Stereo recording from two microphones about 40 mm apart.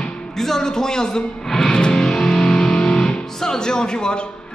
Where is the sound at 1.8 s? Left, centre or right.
Centre.